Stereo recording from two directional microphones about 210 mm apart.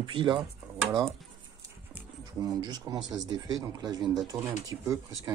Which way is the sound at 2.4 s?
20° right (ahead or behind).